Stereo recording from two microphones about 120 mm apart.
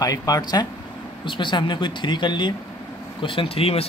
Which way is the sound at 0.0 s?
30° left (ahead or behind).